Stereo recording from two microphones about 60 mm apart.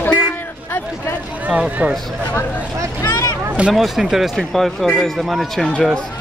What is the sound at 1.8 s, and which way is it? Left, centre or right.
Speech, right.